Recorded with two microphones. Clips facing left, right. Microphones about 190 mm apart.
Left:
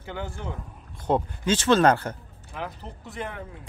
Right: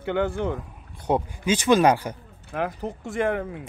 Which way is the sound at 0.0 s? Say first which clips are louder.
Right 10 dB; 60° right (ahead or behind).